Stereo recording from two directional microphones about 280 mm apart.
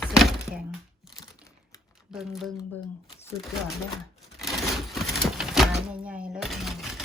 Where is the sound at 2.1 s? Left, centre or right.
Centre.